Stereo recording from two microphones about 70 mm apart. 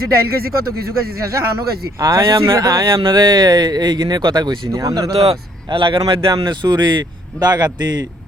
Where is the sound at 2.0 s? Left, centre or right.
Right.